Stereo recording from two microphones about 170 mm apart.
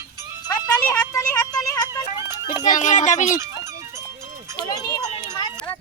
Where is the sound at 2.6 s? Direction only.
45° left (ahead or behind).